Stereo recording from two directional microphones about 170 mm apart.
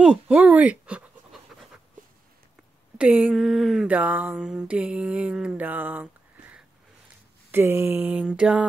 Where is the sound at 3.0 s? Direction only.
5° right (ahead or behind).